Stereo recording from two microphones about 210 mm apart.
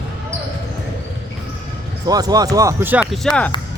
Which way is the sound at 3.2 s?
5° left (ahead or behind).